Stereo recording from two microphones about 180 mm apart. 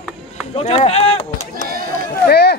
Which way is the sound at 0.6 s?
35° left (ahead or behind).